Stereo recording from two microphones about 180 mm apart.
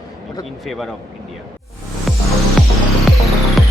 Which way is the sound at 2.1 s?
Centre (ahead or behind).